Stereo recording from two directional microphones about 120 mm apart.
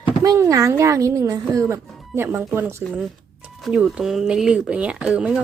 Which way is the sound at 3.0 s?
5° right (ahead or behind).